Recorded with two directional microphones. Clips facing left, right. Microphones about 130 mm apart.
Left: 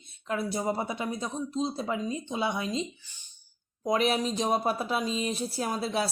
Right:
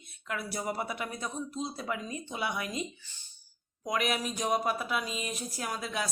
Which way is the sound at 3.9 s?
30° left (ahead or behind).